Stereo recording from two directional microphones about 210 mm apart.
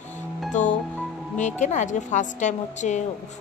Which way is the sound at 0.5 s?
35° left (ahead or behind).